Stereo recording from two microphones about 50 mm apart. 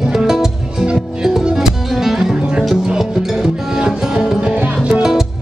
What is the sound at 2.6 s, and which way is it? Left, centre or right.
Music, centre.